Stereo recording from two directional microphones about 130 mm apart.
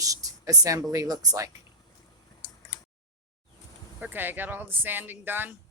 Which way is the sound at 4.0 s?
15° right (ahead or behind).